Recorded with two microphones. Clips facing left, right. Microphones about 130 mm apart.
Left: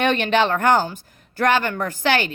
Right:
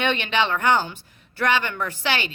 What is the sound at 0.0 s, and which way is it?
Speech, 45° left (ahead or behind).